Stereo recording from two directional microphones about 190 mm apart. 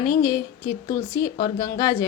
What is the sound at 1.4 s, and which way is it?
Speech, 20° left (ahead or behind).